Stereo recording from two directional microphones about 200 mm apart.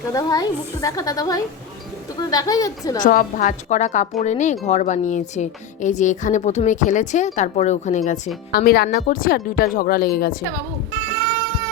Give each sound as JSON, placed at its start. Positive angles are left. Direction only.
{"t": 0.1, "sound": "a woman's voice", "side_deg": 20}
{"t": 3.0, "sound": "speech", "side_deg": 40}
{"t": 8.5, "sound": "speech", "side_deg": 50}